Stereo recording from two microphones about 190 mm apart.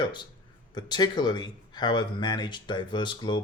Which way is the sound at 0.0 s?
25° left (ahead or behind).